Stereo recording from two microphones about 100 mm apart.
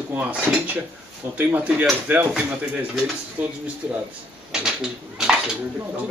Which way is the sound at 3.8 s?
20° right (ahead or behind).